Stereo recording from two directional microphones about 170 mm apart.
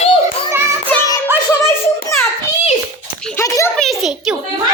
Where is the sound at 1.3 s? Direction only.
15° right (ahead or behind).